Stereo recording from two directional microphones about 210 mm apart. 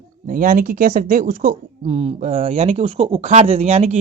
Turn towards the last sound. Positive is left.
turn(degrees=-30)  # may be behind; listen again after turning